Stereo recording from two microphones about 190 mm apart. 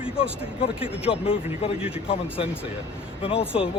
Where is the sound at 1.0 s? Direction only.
30° left (ahead or behind).